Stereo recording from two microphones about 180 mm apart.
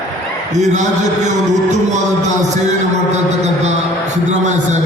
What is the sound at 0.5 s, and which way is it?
Speech, 40° right (ahead or behind).